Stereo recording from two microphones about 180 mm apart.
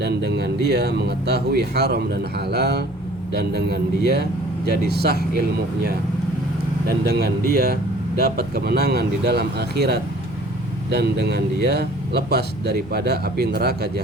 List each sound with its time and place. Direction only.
0.0 s speech: 65° right (ahead or behind)
6.8 s speech: 60° right (ahead or behind)